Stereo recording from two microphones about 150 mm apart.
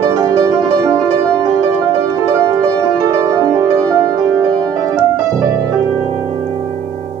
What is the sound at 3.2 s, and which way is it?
Music, 25° right (ahead or behind).